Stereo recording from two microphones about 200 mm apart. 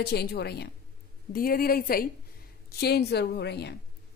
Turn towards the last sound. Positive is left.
turn(degrees=55)  # may be behind; listen again after turning